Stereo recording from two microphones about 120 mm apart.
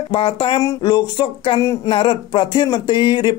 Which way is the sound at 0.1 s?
40° left (ahead or behind).